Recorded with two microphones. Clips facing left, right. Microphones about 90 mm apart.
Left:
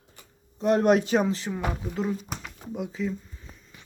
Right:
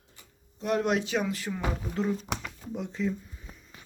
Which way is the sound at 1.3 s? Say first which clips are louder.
Left 4 dB; 25° left (ahead or behind).